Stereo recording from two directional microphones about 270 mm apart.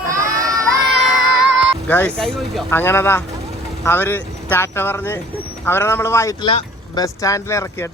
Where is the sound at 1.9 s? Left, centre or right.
Centre.